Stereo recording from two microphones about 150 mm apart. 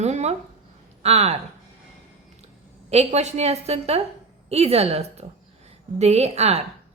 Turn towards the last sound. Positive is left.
turn(degrees=-45)  # may be behind; listen again after turning